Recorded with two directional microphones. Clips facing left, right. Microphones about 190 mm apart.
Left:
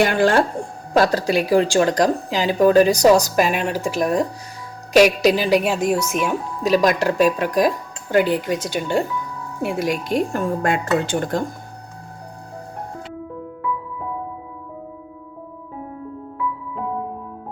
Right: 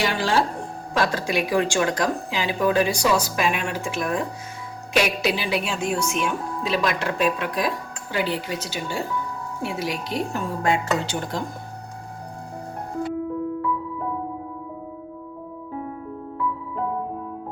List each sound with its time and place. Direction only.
0.0 s speech: 50° left (ahead or behind)
0.9 s speech: 40° left (ahead or behind)
5.9 s speech: 5° left (ahead or behind)
6.6 s speech: 45° left (ahead or behind)